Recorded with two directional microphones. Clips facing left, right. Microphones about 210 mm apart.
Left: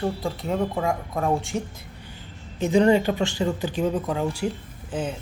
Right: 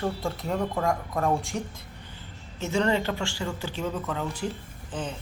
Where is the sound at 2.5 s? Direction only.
15° left (ahead or behind).